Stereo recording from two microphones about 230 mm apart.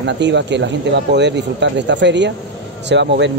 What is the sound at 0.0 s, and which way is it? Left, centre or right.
Speech, right.